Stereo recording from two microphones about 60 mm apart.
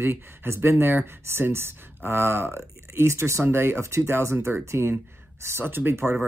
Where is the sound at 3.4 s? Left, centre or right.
Right.